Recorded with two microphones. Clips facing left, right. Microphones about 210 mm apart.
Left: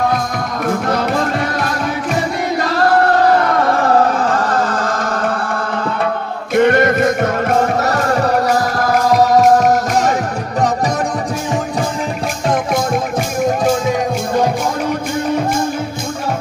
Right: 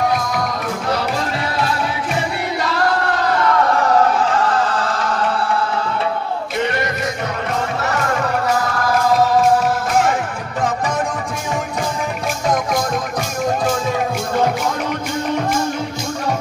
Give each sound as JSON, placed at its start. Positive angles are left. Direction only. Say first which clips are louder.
{"t": 0.7, "sound": "music", "louder": "left 4 dB", "side_deg": 50}
{"t": 3.5, "sound": "music", "louder": "left 2 dB", "side_deg": 40}